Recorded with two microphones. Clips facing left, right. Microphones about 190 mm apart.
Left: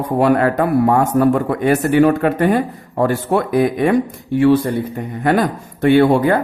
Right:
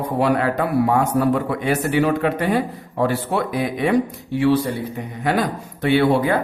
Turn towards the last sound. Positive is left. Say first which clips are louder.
# left 5 dB
turn(degrees=50)  # may be behind; listen again after turning